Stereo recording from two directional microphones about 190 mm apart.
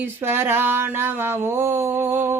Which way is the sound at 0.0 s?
10° right (ahead or behind).